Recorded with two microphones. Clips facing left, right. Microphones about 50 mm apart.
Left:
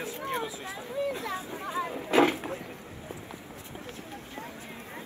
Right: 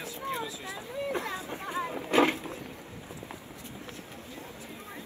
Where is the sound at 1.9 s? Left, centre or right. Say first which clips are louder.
Left 1 dB; right.